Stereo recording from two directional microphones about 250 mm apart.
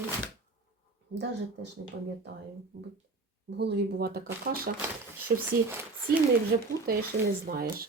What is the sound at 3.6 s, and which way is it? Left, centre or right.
Speech, right.